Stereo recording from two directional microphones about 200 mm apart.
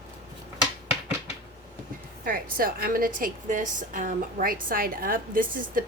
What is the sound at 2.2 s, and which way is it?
A woman's voice, 45° right (ahead or behind).